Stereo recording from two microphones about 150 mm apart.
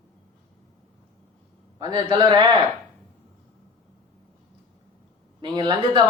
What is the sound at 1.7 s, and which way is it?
Speech, 30° right (ahead or behind).